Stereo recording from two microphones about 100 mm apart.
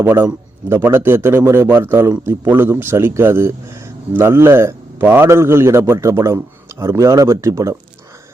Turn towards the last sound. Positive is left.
turn(degrees=-30)  # may be behind; listen again after turning